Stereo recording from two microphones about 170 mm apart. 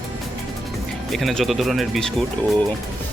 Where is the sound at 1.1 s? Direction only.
Centre (ahead or behind).